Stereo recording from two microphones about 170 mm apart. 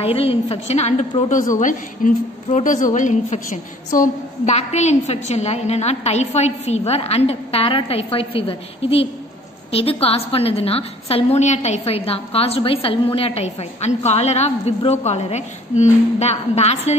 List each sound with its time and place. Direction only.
0.0 s a woman's voice: 35° left (ahead or behind)